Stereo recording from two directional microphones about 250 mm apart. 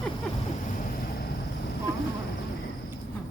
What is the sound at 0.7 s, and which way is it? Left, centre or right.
Vehicle, left.